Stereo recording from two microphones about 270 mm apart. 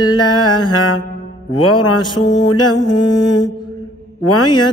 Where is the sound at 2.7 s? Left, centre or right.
Centre.